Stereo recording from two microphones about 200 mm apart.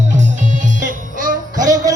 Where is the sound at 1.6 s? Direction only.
15° right (ahead or behind).